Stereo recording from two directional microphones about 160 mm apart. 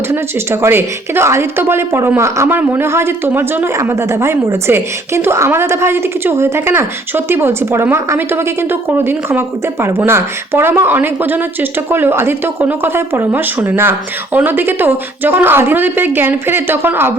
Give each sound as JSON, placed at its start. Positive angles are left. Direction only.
{"t": 0.1, "sound": "a woman's voice", "side_deg": -15}